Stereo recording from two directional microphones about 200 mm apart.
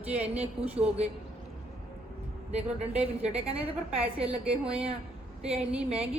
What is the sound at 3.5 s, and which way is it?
A woman's voice, 5° right (ahead or behind).